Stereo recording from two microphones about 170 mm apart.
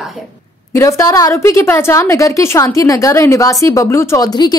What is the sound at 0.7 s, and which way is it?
Speech, 20° left (ahead or behind).